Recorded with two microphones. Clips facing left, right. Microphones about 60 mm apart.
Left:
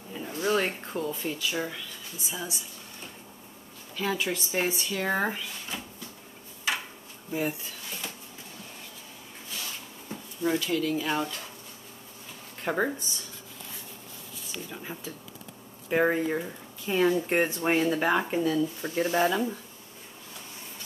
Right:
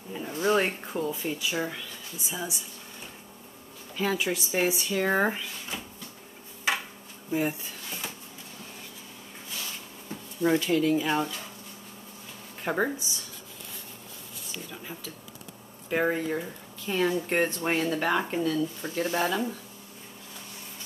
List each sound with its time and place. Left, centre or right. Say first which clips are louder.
0.3 s a sound: right 2 dB; centre
0.7 s speech: right 1 dB; centre
3.9 s speech: right 1 dB; centre
7.2 s a sound: right 2 dB; centre
10.4 s speech: right 3 dB; right
10.9 s speech: right 3 dB; centre
12.6 s speech: even; centre
14.7 s speech: left 2 dB; centre